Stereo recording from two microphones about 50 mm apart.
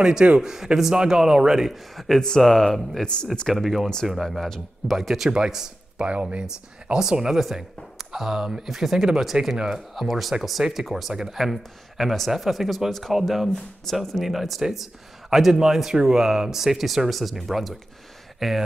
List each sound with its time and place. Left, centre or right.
0.0 s speech: centre
1.7 s speech: centre
3.6 s a man's voice: centre